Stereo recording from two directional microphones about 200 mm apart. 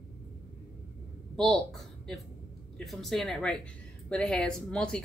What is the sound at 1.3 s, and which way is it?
Speech, centre (ahead or behind).